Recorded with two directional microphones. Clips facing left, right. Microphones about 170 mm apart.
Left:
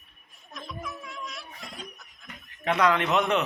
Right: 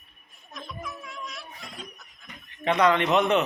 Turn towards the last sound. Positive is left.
turn(degrees=0)  # may be behind; listen again after turning